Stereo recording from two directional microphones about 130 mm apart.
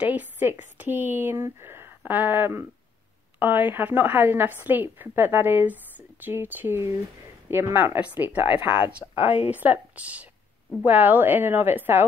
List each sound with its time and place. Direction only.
0.1 s a woman's voice: 15° right (ahead or behind)